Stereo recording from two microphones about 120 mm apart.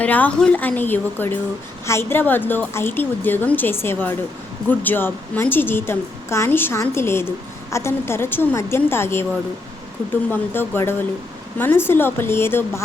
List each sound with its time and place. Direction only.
0.0 s a woman's voice: 10° left (ahead or behind)
10.2 s a woman's voice: 15° left (ahead or behind)